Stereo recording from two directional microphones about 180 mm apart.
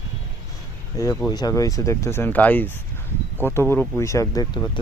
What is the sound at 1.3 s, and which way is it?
Speech, 20° left (ahead or behind).